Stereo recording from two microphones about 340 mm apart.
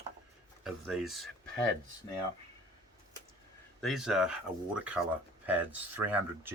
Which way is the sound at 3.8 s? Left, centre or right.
Centre.